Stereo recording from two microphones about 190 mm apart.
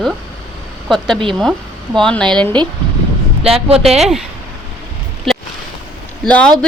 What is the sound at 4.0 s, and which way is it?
Speech, centre (ahead or behind).